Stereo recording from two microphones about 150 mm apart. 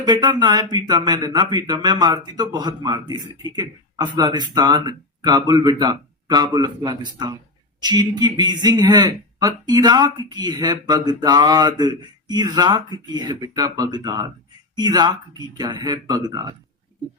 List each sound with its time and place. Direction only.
0.0 s speech: 30° right (ahead or behind)